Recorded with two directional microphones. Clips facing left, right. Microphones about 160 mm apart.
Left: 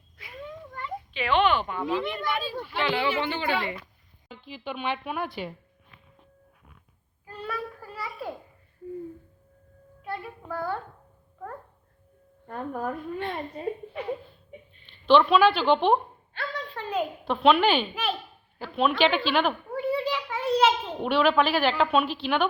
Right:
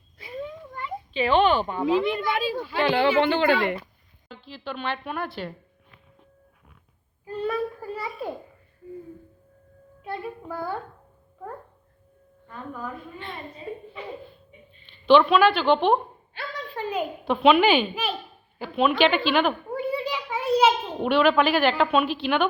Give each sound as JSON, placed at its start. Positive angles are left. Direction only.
{"t": 0.2, "sound": "a sound", "side_deg": -30}
{"t": 1.1, "sound": "speech", "side_deg": -35}
{"t": 2.7, "sound": "speech", "side_deg": -45}
{"t": 3.2, "sound": "speech", "side_deg": -75}
{"t": 4.4, "sound": "a woman's voice", "side_deg": 15}
{"t": 7.3, "sound": "a sound", "side_deg": -20}
{"t": 10.0, "sound": "child singing", "side_deg": -15}
{"t": 12.5, "sound": "a woman's voice", "side_deg": 55}
{"t": 15.0, "sound": "a woman's voice", "side_deg": 0}
{"t": 19.7, "sound": "a sound", "side_deg": -15}
{"t": 21.1, "sound": "a woman's voice", "side_deg": 0}